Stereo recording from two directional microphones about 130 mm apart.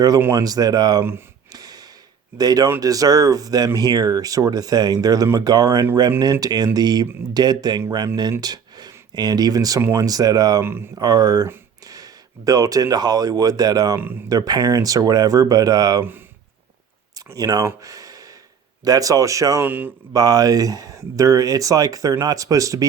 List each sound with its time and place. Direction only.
0.2 s speech: 20° right (ahead or behind)
1.5 s a sound: 30° right (ahead or behind)
2.4 s speech: 30° right (ahead or behind)
10.6 s speech: 15° right (ahead or behind)
11.0 s speech: 30° right (ahead or behind)
17.3 s speech: 30° right (ahead or behind)
17.8 s gasp: 25° right (ahead or behind)
18.9 s speech: 25° right (ahead or behind)
20.1 s speech: 30° right (ahead or behind)